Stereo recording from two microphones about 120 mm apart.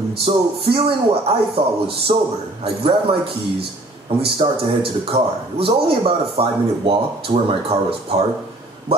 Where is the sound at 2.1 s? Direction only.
55° right (ahead or behind).